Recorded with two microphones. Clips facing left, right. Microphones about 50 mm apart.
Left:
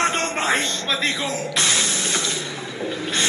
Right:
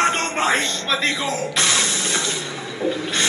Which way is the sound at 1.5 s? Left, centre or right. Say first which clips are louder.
Even; right.